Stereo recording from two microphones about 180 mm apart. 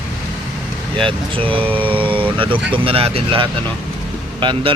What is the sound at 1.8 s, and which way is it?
Vehicle, 30° right (ahead or behind).